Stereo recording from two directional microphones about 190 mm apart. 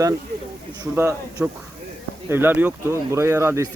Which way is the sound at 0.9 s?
10° right (ahead or behind).